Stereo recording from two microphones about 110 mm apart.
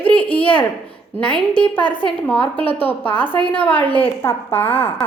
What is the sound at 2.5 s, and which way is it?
Speech, 15° left (ahead or behind).